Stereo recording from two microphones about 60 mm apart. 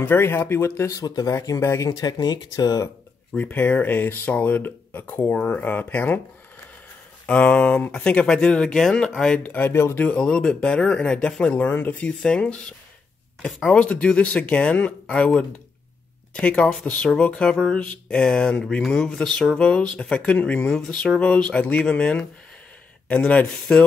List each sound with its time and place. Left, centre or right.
0.0 s speech: left
0.9 s speech: left
1.6 s speech: left
1.9 s speech: left
3.3 s speech: left
7.2 s speech: centre
9.4 s speech: left
9.7 s speech: left
9.9 s speech: centre
12.1 s speech: centre
23.4 s speech: centre